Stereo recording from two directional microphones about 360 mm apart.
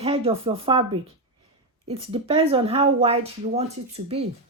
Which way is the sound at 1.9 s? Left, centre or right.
Centre.